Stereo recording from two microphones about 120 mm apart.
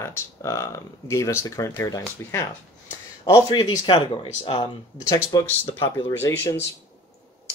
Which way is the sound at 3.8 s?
45° left (ahead or behind).